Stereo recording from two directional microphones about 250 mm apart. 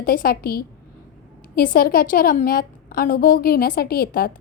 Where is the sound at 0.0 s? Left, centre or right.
Left.